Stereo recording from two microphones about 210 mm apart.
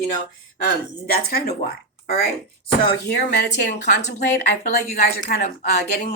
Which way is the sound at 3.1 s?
55° left (ahead or behind).